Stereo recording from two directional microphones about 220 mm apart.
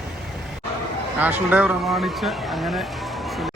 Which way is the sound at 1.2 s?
5° right (ahead or behind).